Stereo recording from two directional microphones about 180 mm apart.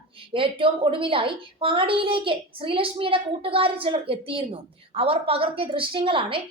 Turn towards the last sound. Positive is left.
turn(degrees=-30)  # may be behind; listen again after turning